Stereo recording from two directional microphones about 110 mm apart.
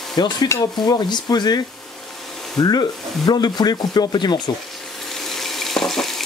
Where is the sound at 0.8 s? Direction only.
40° left (ahead or behind).